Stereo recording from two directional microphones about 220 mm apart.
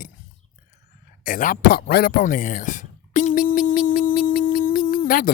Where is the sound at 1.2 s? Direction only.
40° left (ahead or behind).